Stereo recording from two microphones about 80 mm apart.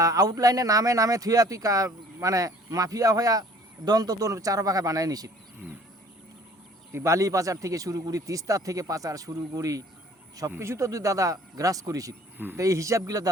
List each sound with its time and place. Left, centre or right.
0.0 s speech: right
6.9 s speech: right